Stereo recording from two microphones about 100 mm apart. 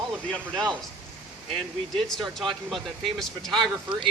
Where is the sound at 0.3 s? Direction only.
5° left (ahead or behind).